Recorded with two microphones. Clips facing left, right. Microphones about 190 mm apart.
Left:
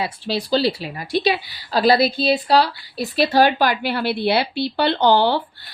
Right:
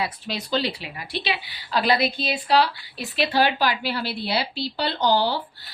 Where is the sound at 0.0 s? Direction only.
30° left (ahead or behind).